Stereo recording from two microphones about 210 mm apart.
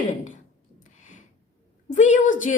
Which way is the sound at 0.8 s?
35° left (ahead or behind).